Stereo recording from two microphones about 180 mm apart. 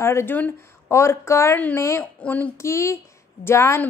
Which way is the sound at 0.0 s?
15° left (ahead or behind).